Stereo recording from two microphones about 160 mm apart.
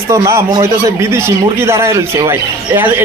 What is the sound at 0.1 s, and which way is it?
Speech, 20° right (ahead or behind).